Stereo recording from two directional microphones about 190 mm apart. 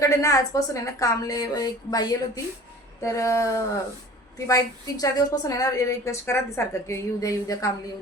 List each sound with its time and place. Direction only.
0.0 s a woman's voice: 15° left (ahead or behind)